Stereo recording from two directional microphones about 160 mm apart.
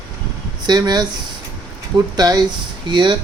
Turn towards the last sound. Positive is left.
turn(degrees=-30)  # may be behind; listen again after turning